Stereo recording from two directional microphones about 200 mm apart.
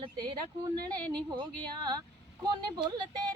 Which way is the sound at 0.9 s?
20° right (ahead or behind).